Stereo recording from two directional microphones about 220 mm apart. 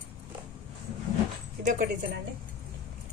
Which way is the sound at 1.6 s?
35° right (ahead or behind).